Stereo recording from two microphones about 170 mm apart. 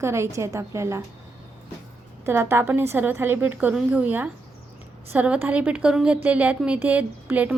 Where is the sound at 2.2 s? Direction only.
15° right (ahead or behind).